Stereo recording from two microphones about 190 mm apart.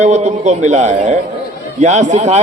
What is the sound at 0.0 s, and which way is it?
A man's voice, 40° right (ahead or behind).